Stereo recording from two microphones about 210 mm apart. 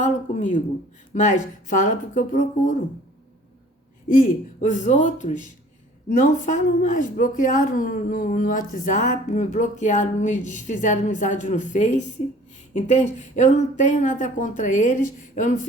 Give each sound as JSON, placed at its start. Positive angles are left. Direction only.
{"t": 0.0, "sound": "speech", "side_deg": 35}
{"t": 4.1, "sound": "speech", "side_deg": 40}